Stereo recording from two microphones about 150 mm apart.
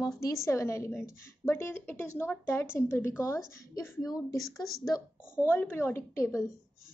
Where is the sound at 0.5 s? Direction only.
20° left (ahead or behind).